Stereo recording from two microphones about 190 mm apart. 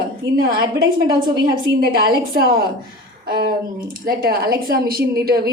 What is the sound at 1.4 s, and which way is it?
A woman's voice, 50° right (ahead or behind).